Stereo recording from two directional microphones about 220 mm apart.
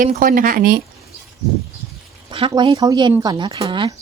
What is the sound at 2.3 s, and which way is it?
Speech, 25° right (ahead or behind).